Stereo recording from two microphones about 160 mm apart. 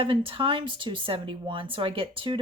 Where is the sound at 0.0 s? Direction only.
30° right (ahead or behind).